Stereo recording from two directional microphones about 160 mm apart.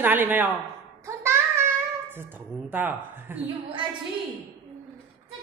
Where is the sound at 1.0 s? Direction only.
15° right (ahead or behind).